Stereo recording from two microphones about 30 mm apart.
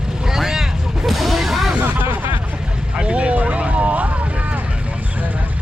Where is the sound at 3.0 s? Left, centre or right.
Right.